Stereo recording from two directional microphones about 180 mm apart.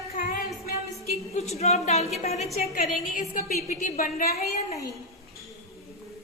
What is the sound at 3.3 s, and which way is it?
A woman's voice, 50° left (ahead or behind).